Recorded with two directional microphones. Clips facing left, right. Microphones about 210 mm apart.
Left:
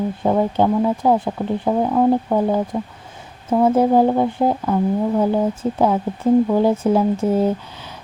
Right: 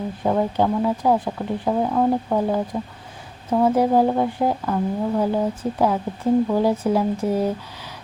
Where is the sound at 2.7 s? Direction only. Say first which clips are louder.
Left 3 dB; 25° left (ahead or behind).